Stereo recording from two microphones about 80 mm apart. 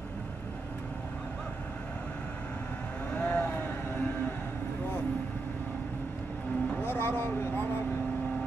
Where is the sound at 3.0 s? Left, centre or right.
Centre.